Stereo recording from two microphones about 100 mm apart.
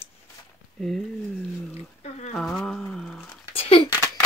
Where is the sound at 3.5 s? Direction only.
70° left (ahead or behind).